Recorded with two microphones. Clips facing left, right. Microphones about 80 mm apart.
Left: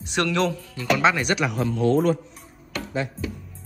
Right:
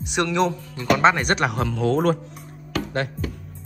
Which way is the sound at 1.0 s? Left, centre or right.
Right.